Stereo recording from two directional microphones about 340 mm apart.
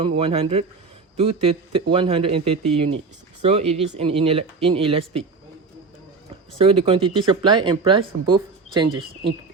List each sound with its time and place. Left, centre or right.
0.0 s speech: centre
6.7 s speech: centre